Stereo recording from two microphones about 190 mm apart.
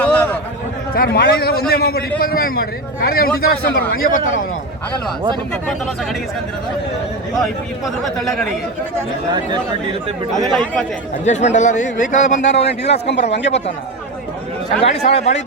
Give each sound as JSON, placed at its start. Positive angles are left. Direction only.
{"t": 0.0, "sound": "a sound", "side_deg": 10}
{"t": 0.9, "sound": "a man's voice", "side_deg": 55}
{"t": 7.4, "sound": "a man's voice", "side_deg": 0}
{"t": 10.4, "sound": "a man's voice", "side_deg": 0}
{"t": 11.3, "sound": "a man's voice", "side_deg": 40}
{"t": 13.1, "sound": "a man's voice", "side_deg": 65}
{"t": 14.8, "sound": "a man's voice", "side_deg": 35}